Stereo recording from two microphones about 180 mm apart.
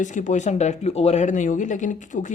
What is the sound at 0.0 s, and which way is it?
Speech, 45° left (ahead or behind).